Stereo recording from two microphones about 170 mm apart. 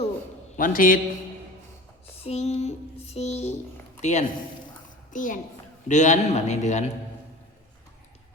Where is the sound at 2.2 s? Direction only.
40° left (ahead or behind).